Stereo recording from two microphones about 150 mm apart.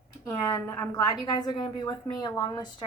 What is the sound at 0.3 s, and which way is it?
Speech, 15° left (ahead or behind).